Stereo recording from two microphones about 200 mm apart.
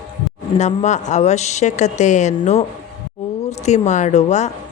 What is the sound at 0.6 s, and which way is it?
Speech, 35° left (ahead or behind).